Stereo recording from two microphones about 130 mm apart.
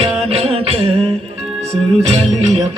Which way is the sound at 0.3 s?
50° right (ahead or behind).